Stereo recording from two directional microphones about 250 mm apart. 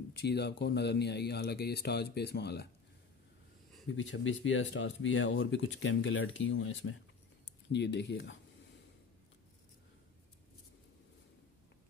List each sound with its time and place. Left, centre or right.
0.1 s speech: left
3.9 s speech: left